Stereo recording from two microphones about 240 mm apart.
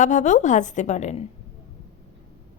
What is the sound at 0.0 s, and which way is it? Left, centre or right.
A woman's voice, left.